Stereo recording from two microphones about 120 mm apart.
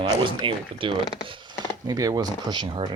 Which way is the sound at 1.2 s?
40° right (ahead or behind).